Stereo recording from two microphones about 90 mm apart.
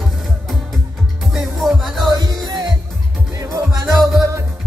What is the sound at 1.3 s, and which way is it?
Music, centre (ahead or behind).